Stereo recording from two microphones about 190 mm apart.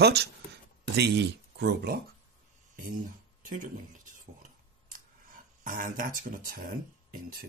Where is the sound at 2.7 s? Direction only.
45° right (ahead or behind).